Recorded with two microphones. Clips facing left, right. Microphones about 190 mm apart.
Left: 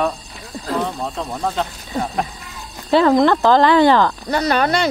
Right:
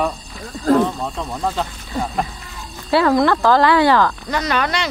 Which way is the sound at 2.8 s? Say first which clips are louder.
Left 2 dB; 20° left (ahead or behind).